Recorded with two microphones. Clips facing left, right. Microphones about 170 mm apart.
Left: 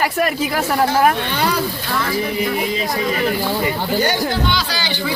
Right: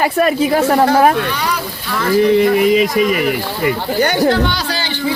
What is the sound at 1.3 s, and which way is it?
Speech, 30° left (ahead or behind).